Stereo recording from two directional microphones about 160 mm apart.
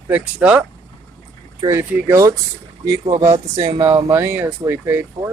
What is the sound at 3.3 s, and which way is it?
Speech, 40° right (ahead or behind).